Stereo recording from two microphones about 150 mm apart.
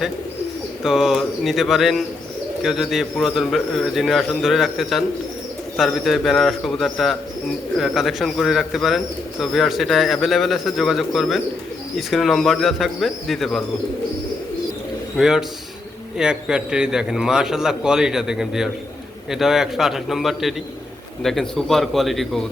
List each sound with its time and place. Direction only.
0.8 s a man's voice: centre (ahead or behind)
15.2 s a man's voice: 5° right (ahead or behind)